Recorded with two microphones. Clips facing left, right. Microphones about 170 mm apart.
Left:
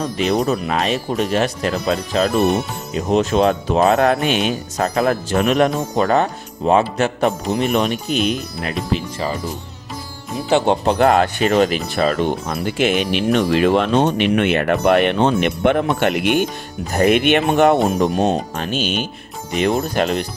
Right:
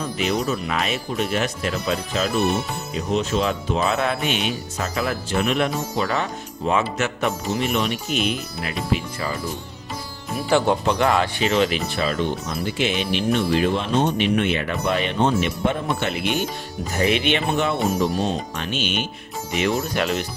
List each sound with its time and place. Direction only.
0.0 s speech: 35° left (ahead or behind)
7.6 s speech: 45° left (ahead or behind)
10.3 s speech: 20° left (ahead or behind)
10.9 s speech: 50° left (ahead or behind)